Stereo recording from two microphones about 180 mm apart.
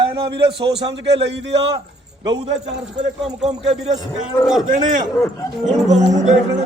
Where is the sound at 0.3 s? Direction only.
70° right (ahead or behind).